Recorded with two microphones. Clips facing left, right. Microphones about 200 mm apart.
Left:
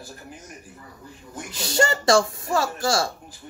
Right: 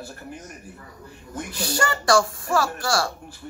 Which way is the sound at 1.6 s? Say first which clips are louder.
Left 3 dB; 25° left (ahead or behind).